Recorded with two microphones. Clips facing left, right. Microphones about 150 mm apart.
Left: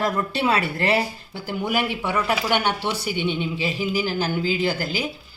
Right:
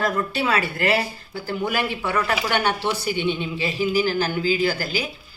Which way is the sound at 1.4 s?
15° left (ahead or behind).